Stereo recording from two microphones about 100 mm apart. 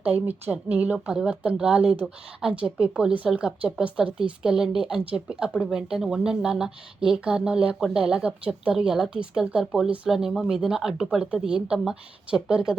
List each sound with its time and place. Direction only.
0.0 s a woman's voice: 20° right (ahead or behind)